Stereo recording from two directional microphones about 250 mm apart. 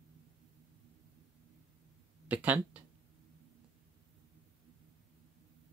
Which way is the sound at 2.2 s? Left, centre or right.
Centre.